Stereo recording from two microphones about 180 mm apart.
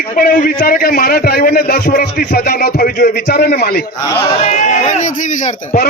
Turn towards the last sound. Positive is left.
turn(degrees=45)  # may be behind; listen again after turning